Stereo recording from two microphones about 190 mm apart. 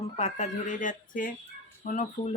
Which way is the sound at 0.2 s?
40° left (ahead or behind).